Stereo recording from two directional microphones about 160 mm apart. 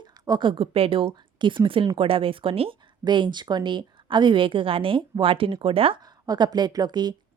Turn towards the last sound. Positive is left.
turn(degrees=-25)  # may be behind; listen again after turning